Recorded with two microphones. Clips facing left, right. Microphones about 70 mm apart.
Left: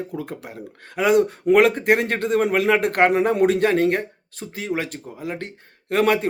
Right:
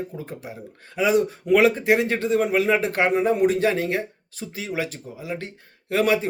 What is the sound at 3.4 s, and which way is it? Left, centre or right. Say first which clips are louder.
Speech: left 3 dB; left.